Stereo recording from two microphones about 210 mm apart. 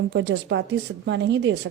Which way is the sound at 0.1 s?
60° right (ahead or behind).